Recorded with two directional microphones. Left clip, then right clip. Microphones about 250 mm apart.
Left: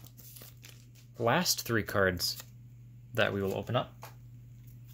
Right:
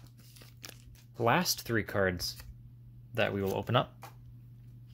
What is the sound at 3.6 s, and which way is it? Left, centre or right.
Speech, right.